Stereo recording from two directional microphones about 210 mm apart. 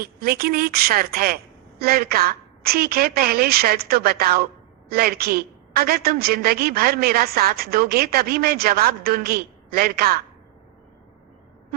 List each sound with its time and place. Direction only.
0.0 s a woman's voice: 45° right (ahead or behind)